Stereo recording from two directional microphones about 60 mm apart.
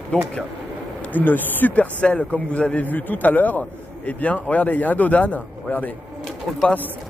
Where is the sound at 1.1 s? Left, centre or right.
Left.